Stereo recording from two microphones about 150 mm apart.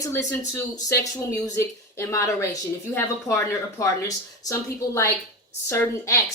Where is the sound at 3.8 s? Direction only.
20° left (ahead or behind).